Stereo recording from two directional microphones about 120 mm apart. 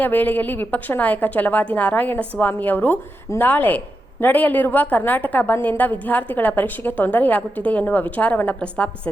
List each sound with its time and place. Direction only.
0.0 s a woman's voice: 15° left (ahead or behind)